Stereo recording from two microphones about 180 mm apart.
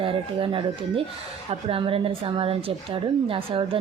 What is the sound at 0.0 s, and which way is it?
Speech, 30° right (ahead or behind).